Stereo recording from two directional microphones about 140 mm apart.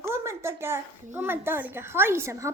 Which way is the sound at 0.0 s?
20° right (ahead or behind).